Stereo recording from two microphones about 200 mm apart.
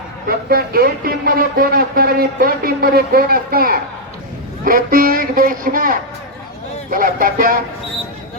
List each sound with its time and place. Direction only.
0.3 s speech: 50° right (ahead or behind)